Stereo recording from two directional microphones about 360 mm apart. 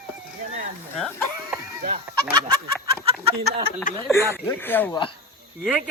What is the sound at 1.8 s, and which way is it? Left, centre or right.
Fowl, centre.